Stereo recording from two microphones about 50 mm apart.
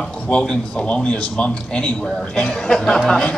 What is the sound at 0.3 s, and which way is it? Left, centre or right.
A man's voice, centre.